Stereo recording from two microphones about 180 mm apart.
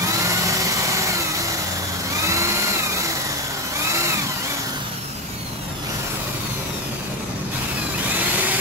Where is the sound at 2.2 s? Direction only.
15° right (ahead or behind).